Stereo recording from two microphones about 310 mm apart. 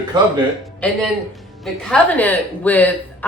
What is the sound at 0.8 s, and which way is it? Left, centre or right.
A woman's voice, centre.